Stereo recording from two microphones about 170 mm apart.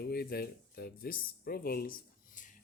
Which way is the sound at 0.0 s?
65° left (ahead or behind).